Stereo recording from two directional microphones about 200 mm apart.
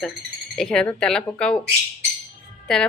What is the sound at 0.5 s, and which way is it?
Speech, 5° left (ahead or behind).